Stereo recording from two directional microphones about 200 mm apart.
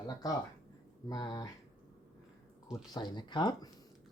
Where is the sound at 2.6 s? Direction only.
20° left (ahead or behind).